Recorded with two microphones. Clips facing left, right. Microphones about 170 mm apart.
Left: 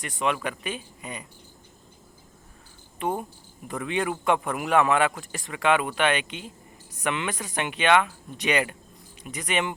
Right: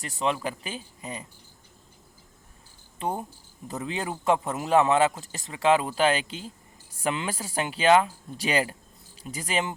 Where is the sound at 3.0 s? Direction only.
30° right (ahead or behind).